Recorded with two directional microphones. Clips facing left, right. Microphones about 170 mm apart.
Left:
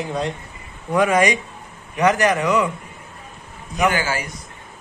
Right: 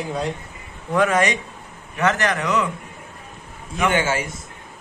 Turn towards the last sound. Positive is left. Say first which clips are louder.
# right 2 dB
turn(degrees=-25)  # may be behind; listen again after turning